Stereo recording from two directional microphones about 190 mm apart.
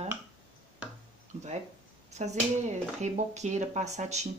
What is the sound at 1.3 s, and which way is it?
Speech, 40° right (ahead or behind).